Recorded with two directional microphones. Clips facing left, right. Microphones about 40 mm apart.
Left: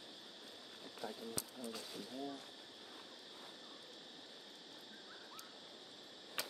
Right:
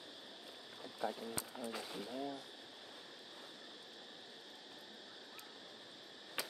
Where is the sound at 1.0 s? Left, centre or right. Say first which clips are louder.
Right 5 dB; right.